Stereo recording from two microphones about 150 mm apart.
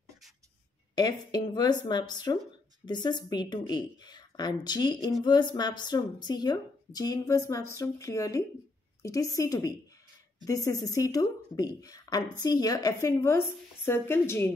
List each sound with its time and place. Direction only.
0.9 s speech: 25° left (ahead or behind)